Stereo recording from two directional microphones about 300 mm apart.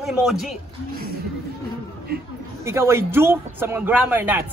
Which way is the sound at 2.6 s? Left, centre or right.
Centre.